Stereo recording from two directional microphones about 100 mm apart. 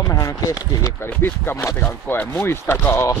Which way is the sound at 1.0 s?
20° left (ahead or behind).